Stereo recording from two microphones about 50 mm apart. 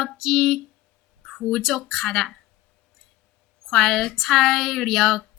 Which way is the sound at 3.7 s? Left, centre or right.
Centre.